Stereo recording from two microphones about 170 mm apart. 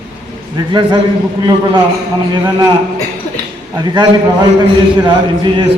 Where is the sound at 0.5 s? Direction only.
30° right (ahead or behind).